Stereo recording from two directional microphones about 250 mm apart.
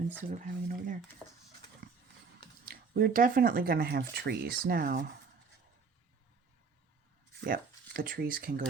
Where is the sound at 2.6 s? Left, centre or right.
Right.